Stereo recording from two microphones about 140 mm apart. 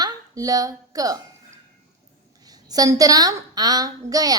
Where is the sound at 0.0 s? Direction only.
25° right (ahead or behind).